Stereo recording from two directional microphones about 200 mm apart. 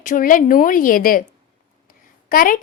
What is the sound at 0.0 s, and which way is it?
A woman's voice, 40° left (ahead or behind).